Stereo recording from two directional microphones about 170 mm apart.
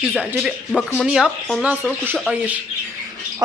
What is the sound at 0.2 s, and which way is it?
Speech, 5° right (ahead or behind).